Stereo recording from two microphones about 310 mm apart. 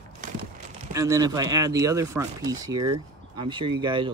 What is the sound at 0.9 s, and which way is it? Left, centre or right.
Speech, centre.